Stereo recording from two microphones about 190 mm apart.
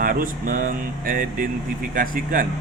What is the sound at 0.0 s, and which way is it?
Speech, 50° right (ahead or behind).